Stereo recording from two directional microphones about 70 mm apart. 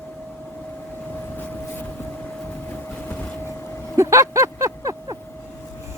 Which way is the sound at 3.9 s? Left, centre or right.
Right.